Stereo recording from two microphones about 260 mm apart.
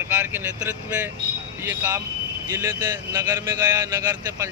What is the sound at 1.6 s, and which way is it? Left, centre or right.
Speech, centre.